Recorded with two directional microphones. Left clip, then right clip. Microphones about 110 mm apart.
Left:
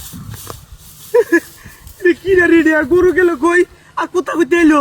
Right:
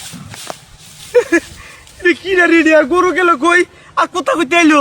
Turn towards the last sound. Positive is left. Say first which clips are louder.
# right 1 dB
turn(degrees=-20)  # may be behind; listen again after turning